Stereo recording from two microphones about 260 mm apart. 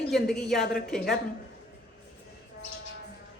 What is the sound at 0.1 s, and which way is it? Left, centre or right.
A woman's voice, centre.